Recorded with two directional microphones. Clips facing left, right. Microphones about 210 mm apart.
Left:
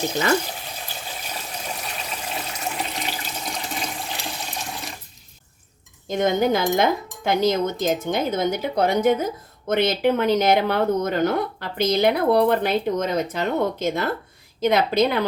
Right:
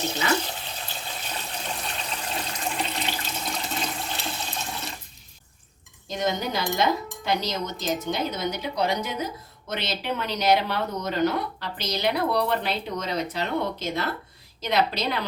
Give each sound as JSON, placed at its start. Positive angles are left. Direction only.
{"t": 1.3, "sound": "water", "side_deg": 10}
{"t": 6.1, "sound": "a woman's voice", "side_deg": 50}